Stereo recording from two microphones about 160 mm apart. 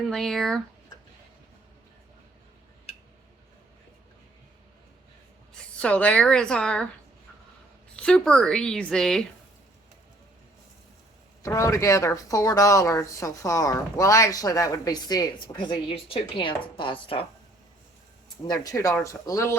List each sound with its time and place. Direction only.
0.1 s a woman's voice: centre (ahead or behind)
2.9 s tick-tock: 40° left (ahead or behind)
5.8 s speech: 10° left (ahead or behind)
7.9 s a woman's voice: 5° left (ahead or behind)
11.4 s speech: 20° left (ahead or behind)
18.4 s speech: 25° left (ahead or behind)